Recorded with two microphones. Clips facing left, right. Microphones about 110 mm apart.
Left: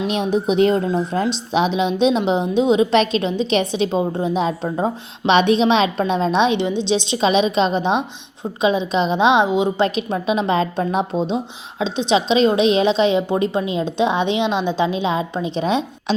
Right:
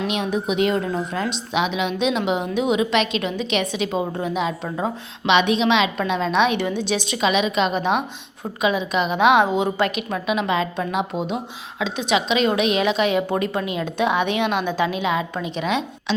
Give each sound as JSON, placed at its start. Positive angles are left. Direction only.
{"t": 0.1, "sound": "a woman's voice", "side_deg": 30}